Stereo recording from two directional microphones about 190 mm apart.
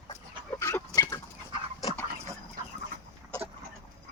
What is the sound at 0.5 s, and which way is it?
Chicken, 15° left (ahead or behind).